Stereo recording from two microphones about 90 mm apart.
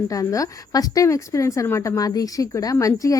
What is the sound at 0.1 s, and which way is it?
A woman's voice, 40° left (ahead or behind).